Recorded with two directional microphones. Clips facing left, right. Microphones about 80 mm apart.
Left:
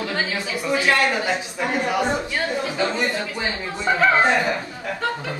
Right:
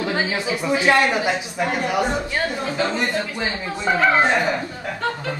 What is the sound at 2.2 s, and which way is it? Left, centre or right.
Speech, centre.